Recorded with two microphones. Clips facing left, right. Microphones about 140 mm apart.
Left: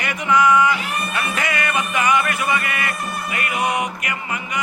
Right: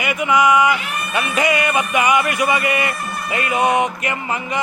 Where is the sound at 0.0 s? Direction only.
10° right (ahead or behind).